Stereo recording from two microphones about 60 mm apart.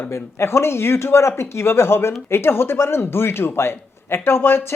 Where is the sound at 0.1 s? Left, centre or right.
Left.